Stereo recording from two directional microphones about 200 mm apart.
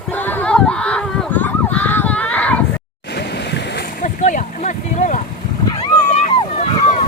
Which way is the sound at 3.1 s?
60° left (ahead or behind).